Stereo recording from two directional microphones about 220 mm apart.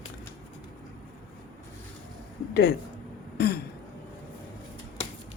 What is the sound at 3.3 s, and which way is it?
Throat clearing, 45° left (ahead or behind).